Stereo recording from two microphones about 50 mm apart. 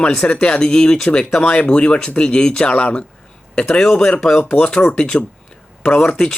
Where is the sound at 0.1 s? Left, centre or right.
Centre.